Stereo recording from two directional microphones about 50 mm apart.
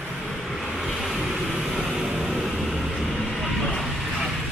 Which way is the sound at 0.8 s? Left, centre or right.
Centre.